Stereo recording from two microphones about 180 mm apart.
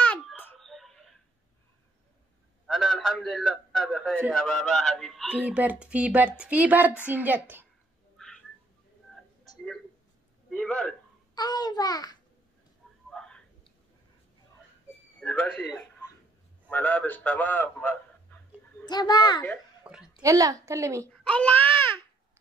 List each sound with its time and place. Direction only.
0.0 s whimper: 10° left (ahead or behind)
2.6 s a sound: centre (ahead or behind)
4.3 s a woman's voice: 5° left (ahead or behind)
10.5 s a sound: 5° left (ahead or behind)
11.3 s a child's voice: 20° left (ahead or behind)
13.1 s whispering: 5° left (ahead or behind)
15.1 s a man's voice: 10° left (ahead or behind)
18.9 s a child's voice: 25° left (ahead or behind)
19.8 s a sound: 5° right (ahead or behind)
20.2 s a woman's voice: 20° right (ahead or behind)
21.1 s a child's voice: 5° left (ahead or behind)